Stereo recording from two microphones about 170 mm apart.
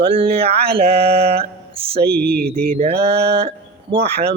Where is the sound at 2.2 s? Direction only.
65° right (ahead or behind).